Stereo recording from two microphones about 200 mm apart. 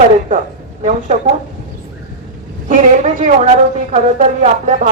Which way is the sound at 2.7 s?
35° right (ahead or behind).